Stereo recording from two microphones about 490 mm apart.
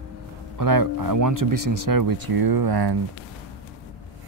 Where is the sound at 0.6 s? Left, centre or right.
Right.